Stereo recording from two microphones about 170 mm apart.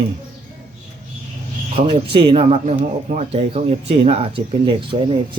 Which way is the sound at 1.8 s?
35° right (ahead or behind).